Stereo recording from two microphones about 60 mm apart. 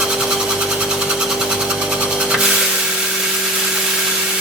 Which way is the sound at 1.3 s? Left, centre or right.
Centre.